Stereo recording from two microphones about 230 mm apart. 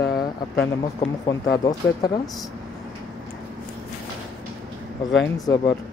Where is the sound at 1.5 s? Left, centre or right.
Centre.